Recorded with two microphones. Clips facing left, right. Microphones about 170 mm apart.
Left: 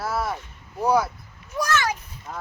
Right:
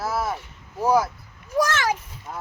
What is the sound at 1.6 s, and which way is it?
Speech, 90° right.